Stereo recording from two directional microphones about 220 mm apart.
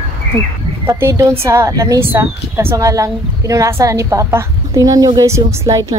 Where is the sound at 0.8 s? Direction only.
15° right (ahead or behind).